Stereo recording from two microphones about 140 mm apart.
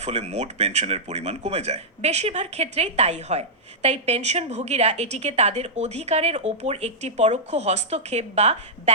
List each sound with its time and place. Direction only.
0.0 s a woman's voice: 50° right (ahead or behind)